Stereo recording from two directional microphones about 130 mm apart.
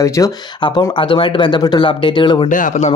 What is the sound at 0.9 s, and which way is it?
Speech, 40° left (ahead or behind).